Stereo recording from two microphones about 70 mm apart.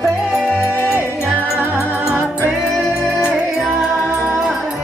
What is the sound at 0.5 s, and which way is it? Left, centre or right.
Music, left.